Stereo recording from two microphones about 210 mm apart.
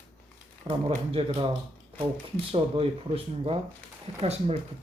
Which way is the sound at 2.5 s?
25° right (ahead or behind).